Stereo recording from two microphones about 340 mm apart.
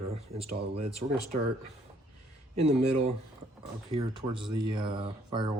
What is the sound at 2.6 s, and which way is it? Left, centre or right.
Speech, centre.